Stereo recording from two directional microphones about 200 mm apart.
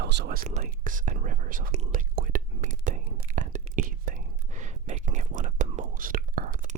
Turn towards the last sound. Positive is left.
turn(degrees=-45)  # may be behind; listen again after turning